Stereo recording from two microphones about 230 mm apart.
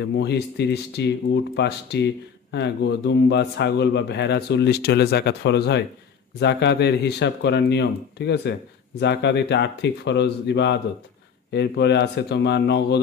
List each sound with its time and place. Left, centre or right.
0.0 s a man's voice: left